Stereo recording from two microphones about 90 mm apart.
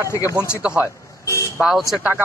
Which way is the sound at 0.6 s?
10° right (ahead or behind).